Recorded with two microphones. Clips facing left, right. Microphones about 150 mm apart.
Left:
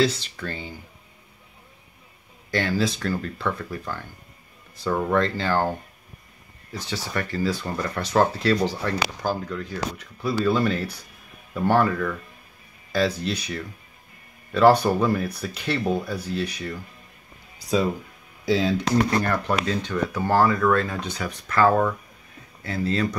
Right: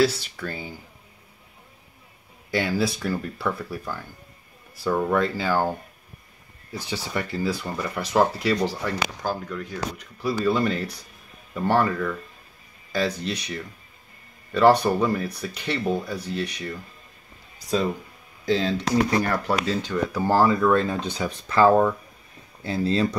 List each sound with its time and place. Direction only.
0.0 s speech: 10° right (ahead or behind)
2.5 s speech: 10° right (ahead or behind)
18.4 s speech: 10° left (ahead or behind)
19.2 s speech: 5° right (ahead or behind); by 23.0 s 25° right (ahead or behind)